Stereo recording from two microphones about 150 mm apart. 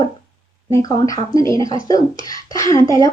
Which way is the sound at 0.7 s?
20° left (ahead or behind).